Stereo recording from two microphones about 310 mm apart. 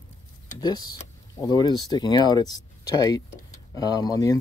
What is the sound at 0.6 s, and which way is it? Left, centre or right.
Speech, centre.